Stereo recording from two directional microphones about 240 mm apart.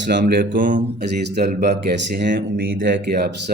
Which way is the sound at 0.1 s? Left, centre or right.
Right.